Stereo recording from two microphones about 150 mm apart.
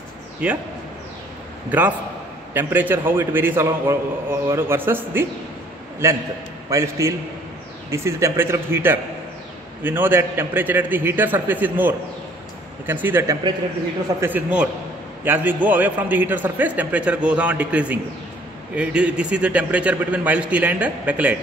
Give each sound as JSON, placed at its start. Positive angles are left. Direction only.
{"t": 0.4, "sound": "a man's voice", "side_deg": -5}
{"t": 1.7, "sound": "a man's voice", "side_deg": -10}
{"t": 6.7, "sound": "a man's voice", "side_deg": -20}